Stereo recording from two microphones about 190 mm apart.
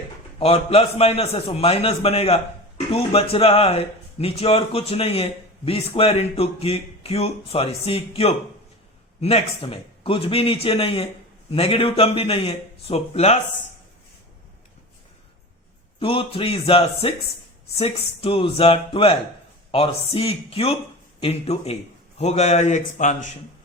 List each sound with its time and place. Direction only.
0.3 s a man's voice: 30° left (ahead or behind)
16.0 s a man's voice: 30° left (ahead or behind)